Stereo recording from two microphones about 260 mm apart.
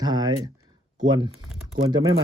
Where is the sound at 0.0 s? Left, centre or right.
Centre.